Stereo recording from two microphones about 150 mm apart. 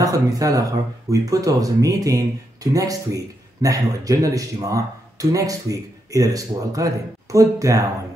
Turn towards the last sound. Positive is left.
turn(degrees=-20)  # may be behind; listen again after turning